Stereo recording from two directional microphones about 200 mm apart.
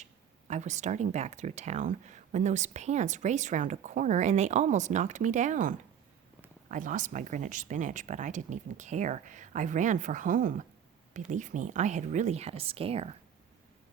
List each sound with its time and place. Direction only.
0.0 s speech: 35° right (ahead or behind)